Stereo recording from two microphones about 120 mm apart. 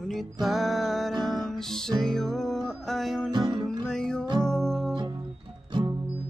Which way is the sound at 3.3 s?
35° right (ahead or behind).